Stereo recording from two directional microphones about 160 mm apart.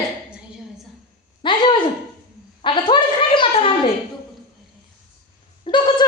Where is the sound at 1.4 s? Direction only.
30° left (ahead or behind).